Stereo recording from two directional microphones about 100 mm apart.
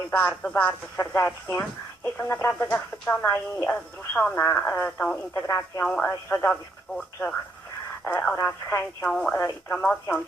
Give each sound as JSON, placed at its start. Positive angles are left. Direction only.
{"t": 0.1, "sound": "speech", "side_deg": 15}
{"t": 3.7, "sound": "speech", "side_deg": 10}
{"t": 5.3, "sound": "speech", "side_deg": 25}
{"t": 5.8, "sound": "speech", "side_deg": 10}
{"t": 8.4, "sound": "speech", "side_deg": 20}
{"t": 9.0, "sound": "speech", "side_deg": 10}